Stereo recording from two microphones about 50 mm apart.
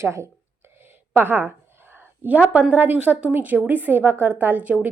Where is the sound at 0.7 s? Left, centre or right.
Right.